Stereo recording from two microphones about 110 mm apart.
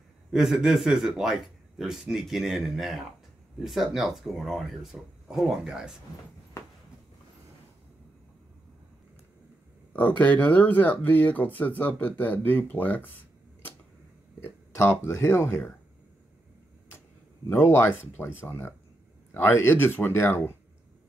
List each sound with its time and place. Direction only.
0.3 s a man's voice: 5° right (ahead or behind)
9.9 s speech: 15° left (ahead or behind)
14.4 s speech: 20° left (ahead or behind)
17.5 s speech: 20° left (ahead or behind)